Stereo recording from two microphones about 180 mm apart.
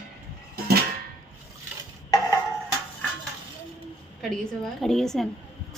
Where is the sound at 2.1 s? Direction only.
20° left (ahead or behind).